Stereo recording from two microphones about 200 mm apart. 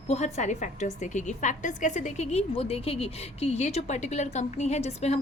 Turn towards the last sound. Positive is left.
turn(degrees=35)  # may be behind; listen again after turning